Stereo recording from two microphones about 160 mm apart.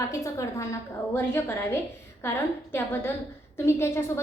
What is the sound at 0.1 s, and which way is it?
A woman's voice, 20° left (ahead or behind).